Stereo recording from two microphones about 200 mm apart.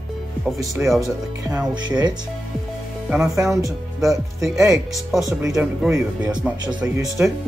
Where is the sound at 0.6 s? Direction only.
15° right (ahead or behind).